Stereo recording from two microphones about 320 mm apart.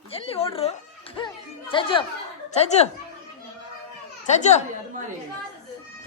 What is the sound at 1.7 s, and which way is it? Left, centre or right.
Speech, centre.